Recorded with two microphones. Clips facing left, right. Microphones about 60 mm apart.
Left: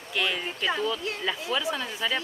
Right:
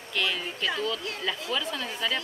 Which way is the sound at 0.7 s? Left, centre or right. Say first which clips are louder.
Left 2 dB; centre.